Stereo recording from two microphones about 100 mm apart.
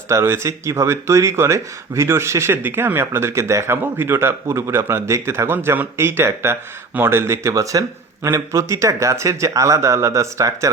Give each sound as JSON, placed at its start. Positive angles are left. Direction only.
{"t": 0.1, "sound": "speech", "side_deg": -25}